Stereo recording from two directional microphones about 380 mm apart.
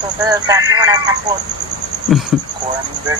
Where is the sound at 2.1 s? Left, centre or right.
Centre.